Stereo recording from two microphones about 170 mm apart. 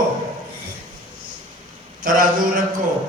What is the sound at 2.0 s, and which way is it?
Speech, 55° right (ahead or behind).